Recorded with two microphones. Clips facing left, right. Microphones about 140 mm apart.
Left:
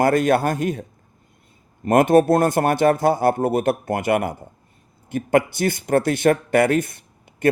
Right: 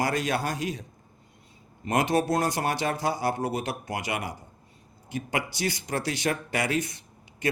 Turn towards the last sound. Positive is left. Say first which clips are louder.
# left 5 dB
turn(degrees=55)  # may be behind; listen again after turning